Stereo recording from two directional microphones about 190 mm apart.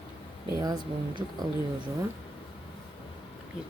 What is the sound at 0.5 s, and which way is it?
Speech, 20° right (ahead or behind).